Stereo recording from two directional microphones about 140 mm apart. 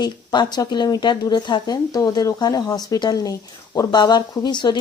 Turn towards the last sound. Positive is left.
turn(degrees=30)  # may be behind; listen again after turning